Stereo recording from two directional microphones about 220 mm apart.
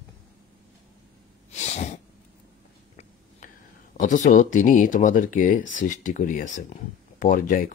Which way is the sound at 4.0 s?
35° left (ahead or behind).